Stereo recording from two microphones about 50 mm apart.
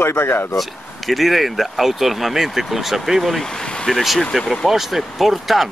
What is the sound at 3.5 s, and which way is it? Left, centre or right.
Vehicle, centre.